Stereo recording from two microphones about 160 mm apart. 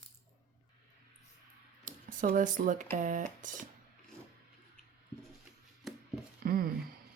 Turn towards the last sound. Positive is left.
turn(degrees=-65)  # may be behind; listen again after turning